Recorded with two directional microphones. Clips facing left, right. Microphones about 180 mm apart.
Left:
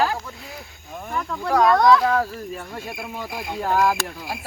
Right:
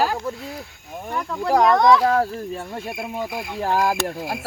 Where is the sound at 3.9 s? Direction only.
50° right (ahead or behind).